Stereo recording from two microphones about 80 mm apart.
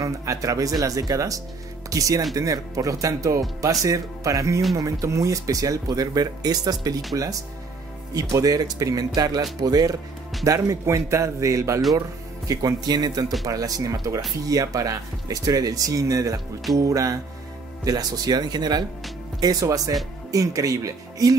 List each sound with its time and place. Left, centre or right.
0.0 s speech: right
8.1 s speech: right
10.4 s speech: right
12.4 s speech: right
19.4 s speech: right